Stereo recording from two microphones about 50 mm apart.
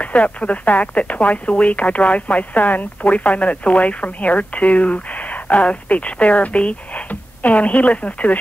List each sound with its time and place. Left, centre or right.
0.0 s speech: left